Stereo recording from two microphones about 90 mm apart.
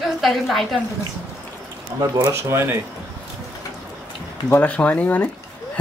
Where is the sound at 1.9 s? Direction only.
55° right (ahead or behind).